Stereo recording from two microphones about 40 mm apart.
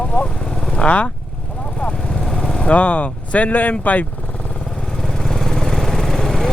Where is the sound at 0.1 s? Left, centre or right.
Left.